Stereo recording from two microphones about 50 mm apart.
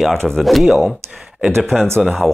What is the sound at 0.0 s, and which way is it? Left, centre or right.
Speech, centre.